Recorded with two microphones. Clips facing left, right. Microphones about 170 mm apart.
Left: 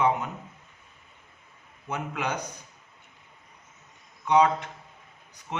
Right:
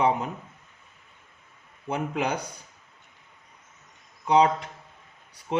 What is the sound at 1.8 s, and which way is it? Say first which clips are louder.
Speech: right 4 dB; 30° right (ahead or behind).